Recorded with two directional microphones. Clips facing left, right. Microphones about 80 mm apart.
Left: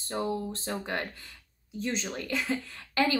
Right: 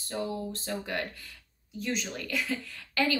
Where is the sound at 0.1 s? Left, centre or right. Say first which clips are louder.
Left 2 dB; left.